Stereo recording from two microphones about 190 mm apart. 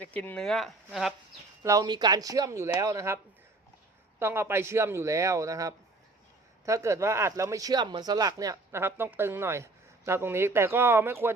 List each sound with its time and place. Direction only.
0.0 s speech: 10° left (ahead or behind)
1.6 s speech: 20° right (ahead or behind)
4.2 s speech: 10° right (ahead or behind)